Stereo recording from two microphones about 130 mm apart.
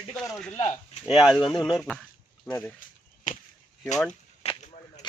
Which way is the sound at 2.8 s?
90° left.